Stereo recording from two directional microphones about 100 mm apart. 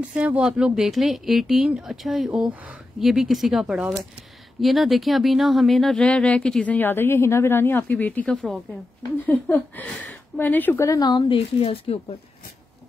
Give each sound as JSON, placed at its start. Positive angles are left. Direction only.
{"t": 0.1, "sound": "speech", "side_deg": -10}
{"t": 8.3, "sound": "speech", "side_deg": 5}
{"t": 9.2, "sound": "speech", "side_deg": 15}
{"t": 10.9, "sound": "speech", "side_deg": 40}
{"t": 11.2, "sound": "speech", "side_deg": 75}